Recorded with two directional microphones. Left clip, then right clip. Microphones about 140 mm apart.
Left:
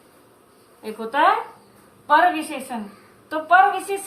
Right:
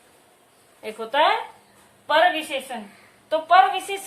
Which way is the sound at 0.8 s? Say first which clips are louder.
Left 1 dB; 25° right (ahead or behind).